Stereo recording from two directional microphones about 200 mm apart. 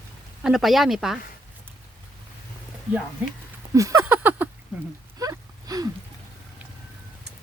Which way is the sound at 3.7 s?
15° right (ahead or behind).